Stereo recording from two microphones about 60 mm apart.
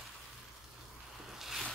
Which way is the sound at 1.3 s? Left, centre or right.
Centre.